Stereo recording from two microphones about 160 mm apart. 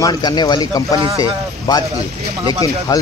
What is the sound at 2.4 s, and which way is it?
Speech, 35° right (ahead or behind).